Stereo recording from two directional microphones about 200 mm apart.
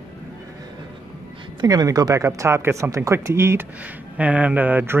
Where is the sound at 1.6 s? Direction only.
20° right (ahead or behind).